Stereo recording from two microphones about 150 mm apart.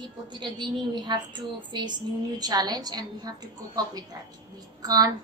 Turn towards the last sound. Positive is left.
turn(degrees=-25)  # may be behind; listen again after turning